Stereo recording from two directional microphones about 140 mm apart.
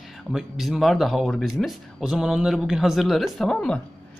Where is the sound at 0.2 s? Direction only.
5° right (ahead or behind).